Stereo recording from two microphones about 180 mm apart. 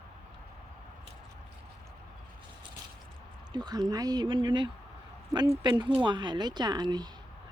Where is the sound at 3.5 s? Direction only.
25° right (ahead or behind).